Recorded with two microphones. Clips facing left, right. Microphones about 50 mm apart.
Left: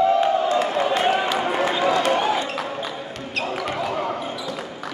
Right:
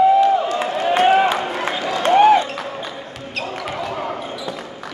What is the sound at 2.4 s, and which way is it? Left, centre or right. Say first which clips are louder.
Basketball bounce: right 3 dB; centre.